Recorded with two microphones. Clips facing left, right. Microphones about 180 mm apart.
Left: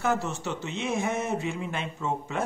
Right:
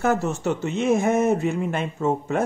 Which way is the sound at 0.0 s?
50° right (ahead or behind).